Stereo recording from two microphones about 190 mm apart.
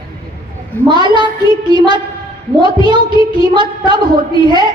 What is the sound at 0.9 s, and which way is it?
A woman's voice, 25° right (ahead or behind).